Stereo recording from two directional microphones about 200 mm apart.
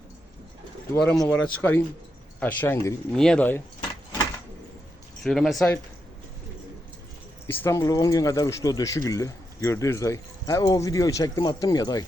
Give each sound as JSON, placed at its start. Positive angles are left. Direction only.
{"t": 1.2, "sound": "speech", "side_deg": 5}
{"t": 5.2, "sound": "speech", "side_deg": 0}
{"t": 7.4, "sound": "speech", "side_deg": 10}